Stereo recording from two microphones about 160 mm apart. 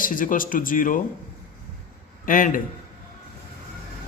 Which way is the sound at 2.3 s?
60° left (ahead or behind).